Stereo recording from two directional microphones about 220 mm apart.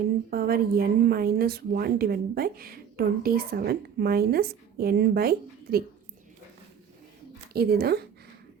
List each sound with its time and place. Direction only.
0.3 s speech: 45° right (ahead or behind)
7.5 s speech: 45° right (ahead or behind)